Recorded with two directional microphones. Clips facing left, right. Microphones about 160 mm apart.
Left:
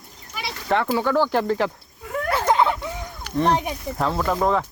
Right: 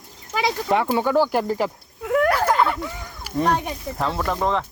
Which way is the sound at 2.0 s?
70° right (ahead or behind).